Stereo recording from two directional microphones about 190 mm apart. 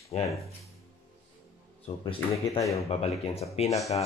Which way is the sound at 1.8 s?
30° left (ahead or behind).